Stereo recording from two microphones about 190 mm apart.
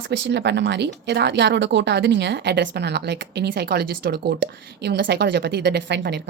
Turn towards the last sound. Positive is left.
turn(degrees=-60)  # may be behind; listen again after turning